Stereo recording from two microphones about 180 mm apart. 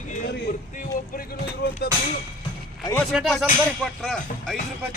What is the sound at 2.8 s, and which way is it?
Speech, 10° left (ahead or behind).